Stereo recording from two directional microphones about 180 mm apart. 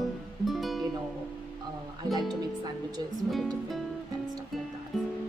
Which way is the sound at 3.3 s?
Centre (ahead or behind).